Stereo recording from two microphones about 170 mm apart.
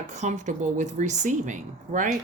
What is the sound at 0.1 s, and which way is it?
Speech, 45° right (ahead or behind).